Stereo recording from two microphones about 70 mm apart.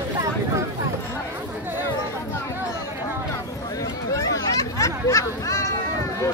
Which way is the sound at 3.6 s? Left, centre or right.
Left.